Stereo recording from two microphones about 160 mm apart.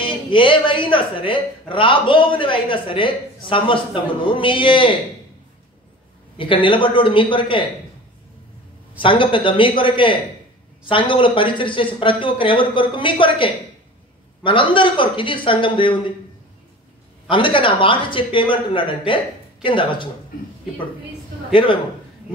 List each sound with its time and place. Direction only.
0.0 s a man's voice: 30° left (ahead or behind)
6.3 s a man's voice: 30° left (ahead or behind)
8.9 s a man's voice: 30° left (ahead or behind)
17.3 s a man's voice: 30° left (ahead or behind)